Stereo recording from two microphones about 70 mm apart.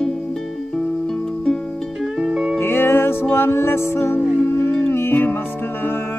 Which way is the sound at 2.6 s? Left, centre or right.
Left.